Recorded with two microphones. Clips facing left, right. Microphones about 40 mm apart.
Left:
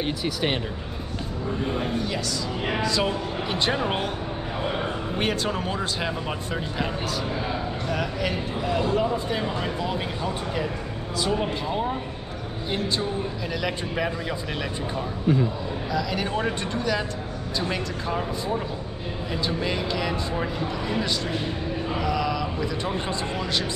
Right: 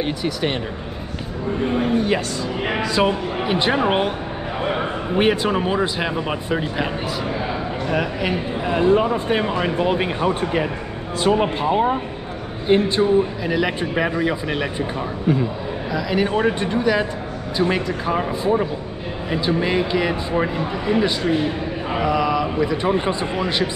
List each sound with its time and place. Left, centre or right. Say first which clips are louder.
0.0 s speech: right 4 dB; centre
2.0 s speech: right 8 dB; right
2.6 s speech: right 5 dB; right